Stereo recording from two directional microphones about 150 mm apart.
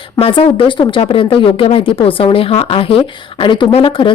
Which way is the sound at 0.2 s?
35° left (ahead or behind).